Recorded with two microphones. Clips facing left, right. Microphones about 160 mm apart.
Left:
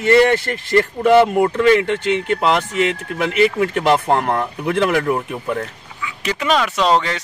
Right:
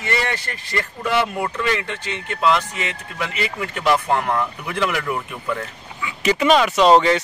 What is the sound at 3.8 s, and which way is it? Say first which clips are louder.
Speech: left 1 dB; 25° left (ahead or behind).